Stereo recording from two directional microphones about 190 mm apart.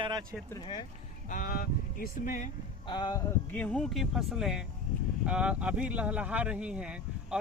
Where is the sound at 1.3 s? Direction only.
45° left (ahead or behind).